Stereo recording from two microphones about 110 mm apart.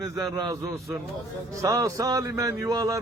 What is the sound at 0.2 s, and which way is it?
A man's voice, 35° right (ahead or behind).